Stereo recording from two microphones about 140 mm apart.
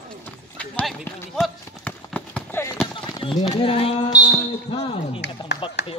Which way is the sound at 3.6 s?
40° left (ahead or behind).